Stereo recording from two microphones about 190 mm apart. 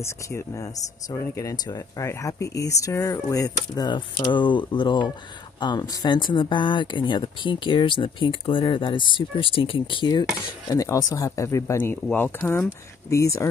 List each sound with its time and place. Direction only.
0.0 s speech: 15° left (ahead or behind)